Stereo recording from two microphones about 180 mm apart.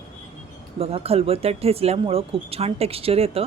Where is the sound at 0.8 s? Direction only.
35° right (ahead or behind).